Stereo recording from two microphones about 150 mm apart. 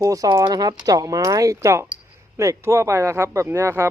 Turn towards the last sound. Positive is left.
turn(degrees=-15)  # may be behind; listen again after turning